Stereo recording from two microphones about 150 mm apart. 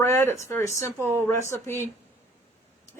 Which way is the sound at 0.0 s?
15° left (ahead or behind).